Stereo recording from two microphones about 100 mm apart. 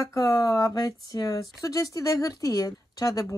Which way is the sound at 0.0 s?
35° left (ahead or behind).